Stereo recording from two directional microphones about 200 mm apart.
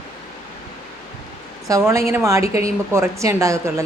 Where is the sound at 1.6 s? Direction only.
15° right (ahead or behind).